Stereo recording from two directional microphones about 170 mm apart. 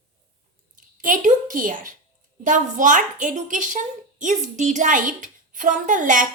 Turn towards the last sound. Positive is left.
turn(degrees=-50)  # may be behind; listen again after turning